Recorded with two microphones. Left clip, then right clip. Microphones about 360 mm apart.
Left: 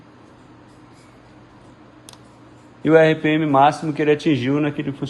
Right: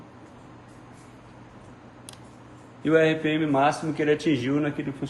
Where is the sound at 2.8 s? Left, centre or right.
Centre.